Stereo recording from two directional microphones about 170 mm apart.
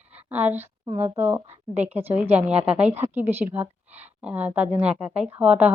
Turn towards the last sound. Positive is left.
turn(degrees=-5)  # may be behind; listen again after turning